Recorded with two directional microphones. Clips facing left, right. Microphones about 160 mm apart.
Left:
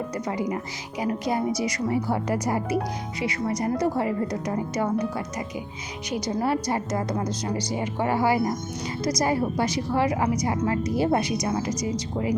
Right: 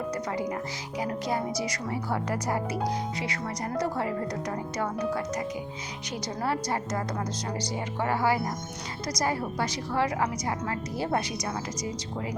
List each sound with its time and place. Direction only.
0.3 s speech: 15° left (ahead or behind)